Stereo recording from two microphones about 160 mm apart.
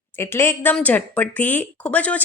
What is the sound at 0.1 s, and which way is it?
A woman's voice, 15° left (ahead or behind).